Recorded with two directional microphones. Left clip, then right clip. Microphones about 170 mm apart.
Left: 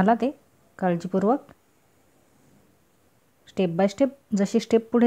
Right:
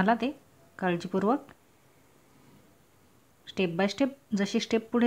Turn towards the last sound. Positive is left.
turn(degrees=40)  # may be behind; listen again after turning